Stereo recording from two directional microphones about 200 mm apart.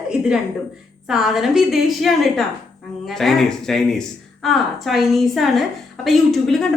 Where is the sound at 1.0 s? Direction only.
Centre (ahead or behind).